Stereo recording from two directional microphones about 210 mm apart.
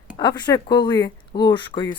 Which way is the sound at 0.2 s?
20° left (ahead or behind).